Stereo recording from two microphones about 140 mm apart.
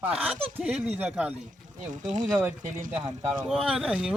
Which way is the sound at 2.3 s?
15° right (ahead or behind).